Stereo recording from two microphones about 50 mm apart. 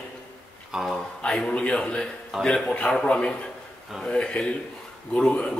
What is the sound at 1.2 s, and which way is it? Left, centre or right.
A man's voice, left.